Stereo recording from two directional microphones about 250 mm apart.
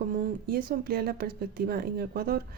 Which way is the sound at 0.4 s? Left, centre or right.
Right.